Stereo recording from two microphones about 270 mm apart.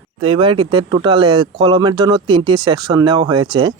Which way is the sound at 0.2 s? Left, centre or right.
Centre.